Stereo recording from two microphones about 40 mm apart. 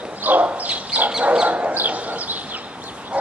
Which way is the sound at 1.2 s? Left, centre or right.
Right.